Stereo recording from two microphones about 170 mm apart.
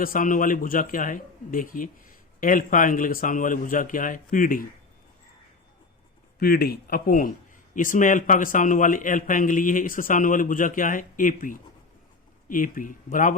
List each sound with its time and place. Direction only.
0.0 s a man's voice: 55° left (ahead or behind)
6.4 s a man's voice: 65° left (ahead or behind)